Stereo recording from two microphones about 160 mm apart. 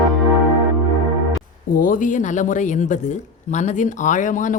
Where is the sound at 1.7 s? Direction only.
60° left (ahead or behind).